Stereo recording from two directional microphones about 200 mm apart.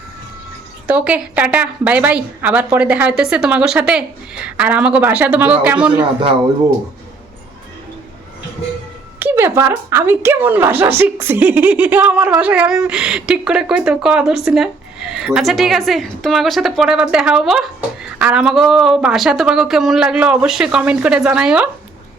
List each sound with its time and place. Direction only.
0.9 s speech: 5° right (ahead or behind)
9.1 s speech: 10° right (ahead or behind)